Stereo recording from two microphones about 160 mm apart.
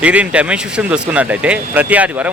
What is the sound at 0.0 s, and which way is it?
Speech, 10° right (ahead or behind).